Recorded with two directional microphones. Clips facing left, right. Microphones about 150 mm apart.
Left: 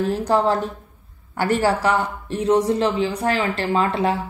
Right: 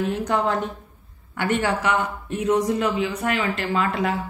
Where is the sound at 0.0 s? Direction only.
35° left (ahead or behind).